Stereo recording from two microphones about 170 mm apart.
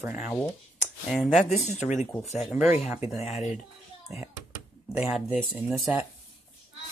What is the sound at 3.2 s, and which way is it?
Speech, 40° left (ahead or behind).